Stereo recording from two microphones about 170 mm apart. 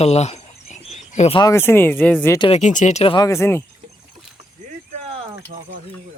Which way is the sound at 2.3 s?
30° left (ahead or behind).